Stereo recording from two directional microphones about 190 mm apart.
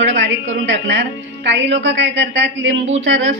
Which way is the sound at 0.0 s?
70° right (ahead or behind).